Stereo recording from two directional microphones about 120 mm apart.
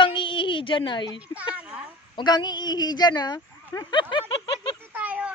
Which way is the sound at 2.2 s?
35° left (ahead or behind).